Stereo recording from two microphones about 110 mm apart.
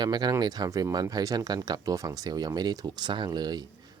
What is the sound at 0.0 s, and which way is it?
Speech, 40° right (ahead or behind).